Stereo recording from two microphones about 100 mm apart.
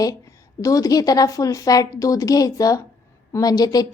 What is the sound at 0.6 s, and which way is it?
Speech, 35° left (ahead or behind).